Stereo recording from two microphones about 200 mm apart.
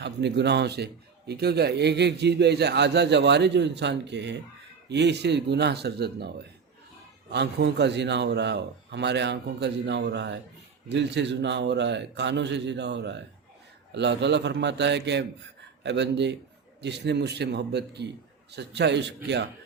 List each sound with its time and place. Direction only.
0.0 s a man's voice: 60° right (ahead or behind)